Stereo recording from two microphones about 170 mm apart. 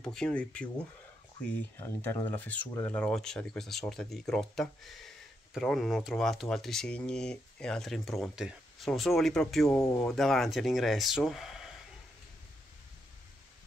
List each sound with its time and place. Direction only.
0.0 s speech: 5° left (ahead or behind)
1.8 s speech: 10° left (ahead or behind)
9.8 s speech: 15° left (ahead or behind)
10.0 s speech: centre (ahead or behind)